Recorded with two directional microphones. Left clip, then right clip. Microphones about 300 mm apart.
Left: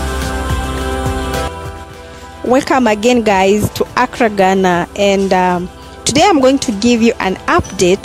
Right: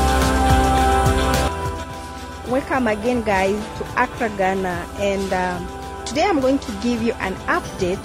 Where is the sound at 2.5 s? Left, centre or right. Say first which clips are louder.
Left 9 dB; left.